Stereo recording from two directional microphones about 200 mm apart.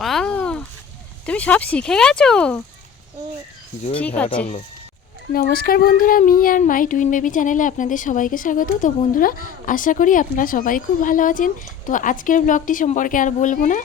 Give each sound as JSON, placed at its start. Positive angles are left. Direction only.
{"t": 0.0, "sound": "a sound", "side_deg": 0}
{"t": 1.2, "sound": "speech", "side_deg": 5}
{"t": 5.3, "sound": "speech", "side_deg": 45}